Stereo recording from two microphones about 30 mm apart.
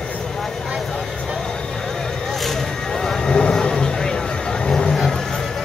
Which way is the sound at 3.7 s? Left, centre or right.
Centre.